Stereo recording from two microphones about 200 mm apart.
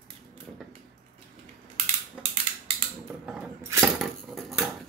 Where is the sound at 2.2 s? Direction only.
30° right (ahead or behind).